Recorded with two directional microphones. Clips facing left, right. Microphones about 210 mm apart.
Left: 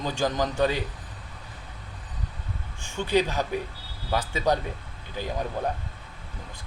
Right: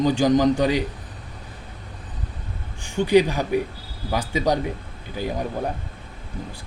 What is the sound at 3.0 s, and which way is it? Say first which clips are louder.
Speech: right 7 dB; 15° right (ahead or behind).